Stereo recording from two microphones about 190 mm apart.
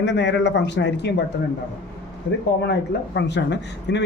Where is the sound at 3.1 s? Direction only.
65° left (ahead or behind).